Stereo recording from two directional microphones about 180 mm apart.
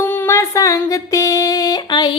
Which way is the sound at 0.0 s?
10° left (ahead or behind).